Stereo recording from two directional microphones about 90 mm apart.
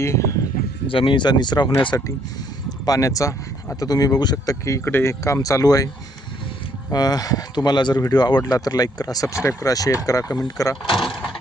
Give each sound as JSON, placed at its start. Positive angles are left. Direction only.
{"t": 0.0, "sound": "speech", "side_deg": 35}
{"t": 0.9, "sound": "speech", "side_deg": 75}
{"t": 1.9, "sound": "speech", "side_deg": 40}
{"t": 4.6, "sound": "speech", "side_deg": 30}
{"t": 5.2, "sound": "speech", "side_deg": 40}
{"t": 6.9, "sound": "speech", "side_deg": 45}
{"t": 10.9, "sound": "door", "side_deg": -5}